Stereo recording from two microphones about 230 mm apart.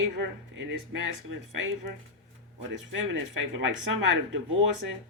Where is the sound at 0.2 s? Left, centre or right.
Right.